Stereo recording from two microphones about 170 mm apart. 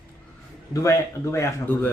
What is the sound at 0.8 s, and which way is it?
Speech, 15° left (ahead or behind).